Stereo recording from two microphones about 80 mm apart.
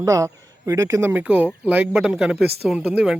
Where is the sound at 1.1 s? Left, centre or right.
Right.